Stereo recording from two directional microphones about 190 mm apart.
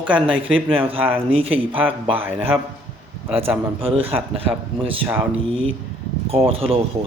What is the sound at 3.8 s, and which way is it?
Speech, 30° right (ahead or behind).